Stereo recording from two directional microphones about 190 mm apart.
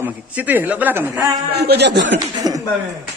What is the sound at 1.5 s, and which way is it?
Speech, 60° right (ahead or behind).